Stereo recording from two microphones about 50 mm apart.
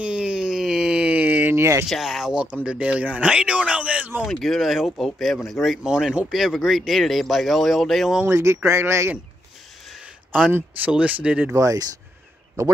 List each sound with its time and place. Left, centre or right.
0.0 s a sound: right
1.5 s speech: right
2.0 s speech: centre
2.4 s speech: right
4.2 s speech: centre
8.3 s speech: right
10.9 s speech: right